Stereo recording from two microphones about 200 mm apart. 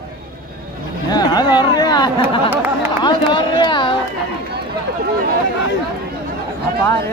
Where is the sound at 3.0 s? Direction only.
20° left (ahead or behind).